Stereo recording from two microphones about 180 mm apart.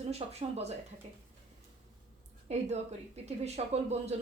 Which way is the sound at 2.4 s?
35° right (ahead or behind).